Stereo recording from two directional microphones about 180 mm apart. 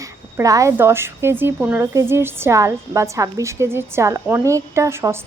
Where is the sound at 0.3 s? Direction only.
15° right (ahead or behind).